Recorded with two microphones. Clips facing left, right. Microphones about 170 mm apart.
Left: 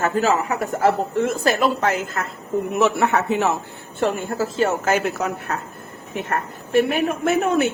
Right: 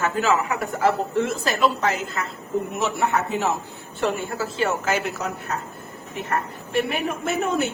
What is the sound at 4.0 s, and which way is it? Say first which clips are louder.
Speech: left 3 dB; 45° left (ahead or behind).